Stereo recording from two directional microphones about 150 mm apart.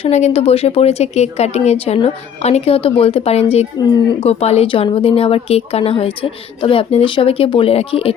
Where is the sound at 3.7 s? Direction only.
30° left (ahead or behind).